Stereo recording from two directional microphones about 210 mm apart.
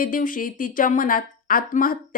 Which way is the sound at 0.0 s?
40° left (ahead or behind).